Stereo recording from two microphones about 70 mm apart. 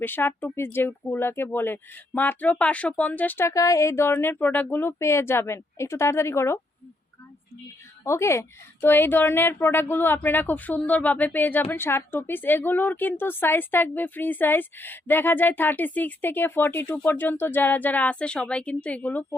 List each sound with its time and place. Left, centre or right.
0.0 s a woman's voice: left
3.4 s speech: left
8.0 s a woman's voice: left